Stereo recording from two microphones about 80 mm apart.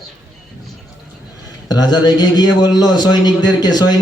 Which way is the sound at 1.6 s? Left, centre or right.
Left.